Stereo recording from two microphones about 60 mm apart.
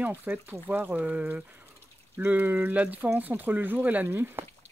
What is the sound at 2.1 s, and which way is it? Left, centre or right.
Speech, right.